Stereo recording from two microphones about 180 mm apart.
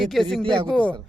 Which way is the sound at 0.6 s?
5° left (ahead or behind).